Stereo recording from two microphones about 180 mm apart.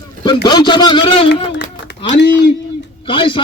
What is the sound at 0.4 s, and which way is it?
Speech, 25° left (ahead or behind).